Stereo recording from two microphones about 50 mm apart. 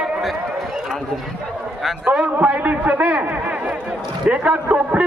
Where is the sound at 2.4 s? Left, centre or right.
Right.